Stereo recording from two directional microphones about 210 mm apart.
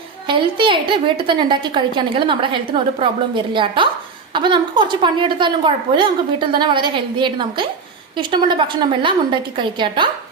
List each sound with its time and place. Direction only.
0.3 s a woman's voice: 25° right (ahead or behind)